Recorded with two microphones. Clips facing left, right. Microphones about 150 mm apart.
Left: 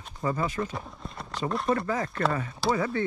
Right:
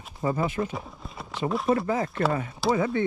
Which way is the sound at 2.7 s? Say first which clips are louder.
Right 3 dB; 25° right (ahead or behind).